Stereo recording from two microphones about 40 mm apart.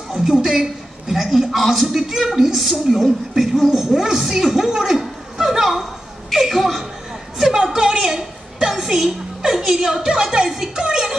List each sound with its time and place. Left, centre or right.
0.1 s a woman's voice: centre
7.5 s speech: centre
8.0 s a sound: centre
10.0 s speech: right